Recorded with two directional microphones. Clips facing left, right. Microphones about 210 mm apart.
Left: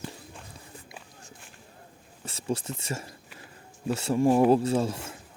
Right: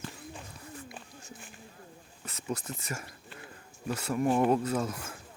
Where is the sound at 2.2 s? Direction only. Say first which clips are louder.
Left 5 dB; 30° left (ahead or behind).